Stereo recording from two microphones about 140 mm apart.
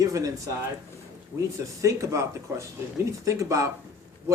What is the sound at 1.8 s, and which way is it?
Speech, 20° right (ahead or behind).